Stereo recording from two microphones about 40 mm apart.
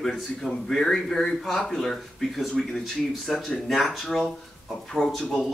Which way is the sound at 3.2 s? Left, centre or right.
Centre.